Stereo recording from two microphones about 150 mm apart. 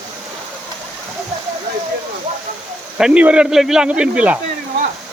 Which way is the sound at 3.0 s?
10° right (ahead or behind).